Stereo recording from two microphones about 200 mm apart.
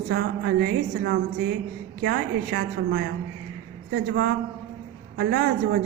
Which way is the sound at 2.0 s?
50° right (ahead or behind).